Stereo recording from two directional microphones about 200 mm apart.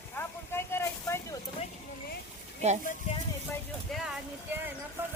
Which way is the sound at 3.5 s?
Centre (ahead or behind).